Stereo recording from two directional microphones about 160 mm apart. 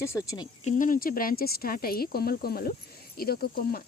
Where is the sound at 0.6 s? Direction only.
55° left (ahead or behind).